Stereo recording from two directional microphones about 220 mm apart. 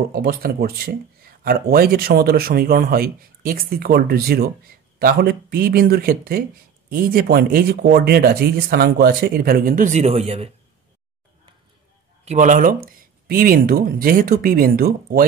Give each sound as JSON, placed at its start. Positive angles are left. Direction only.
{"t": 0.1, "sound": "speech", "side_deg": -45}
{"t": 12.3, "sound": "speech", "side_deg": -35}